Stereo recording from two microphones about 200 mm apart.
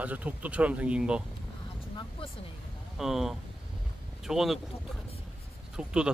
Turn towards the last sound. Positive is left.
turn(degrees=-5)  # may be behind; listen again after turning